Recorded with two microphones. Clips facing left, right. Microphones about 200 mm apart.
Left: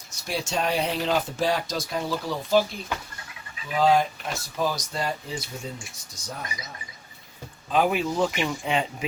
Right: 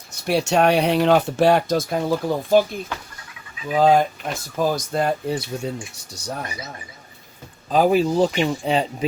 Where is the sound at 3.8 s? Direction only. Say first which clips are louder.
Right 5 dB; 50° right (ahead or behind).